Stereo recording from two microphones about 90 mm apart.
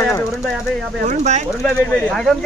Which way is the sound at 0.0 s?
30° left (ahead or behind).